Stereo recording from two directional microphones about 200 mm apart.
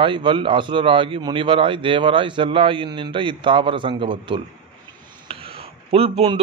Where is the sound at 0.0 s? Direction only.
25° right (ahead or behind).